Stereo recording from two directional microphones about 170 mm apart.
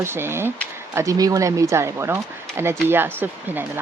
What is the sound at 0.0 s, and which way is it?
Speech, 15° right (ahead or behind).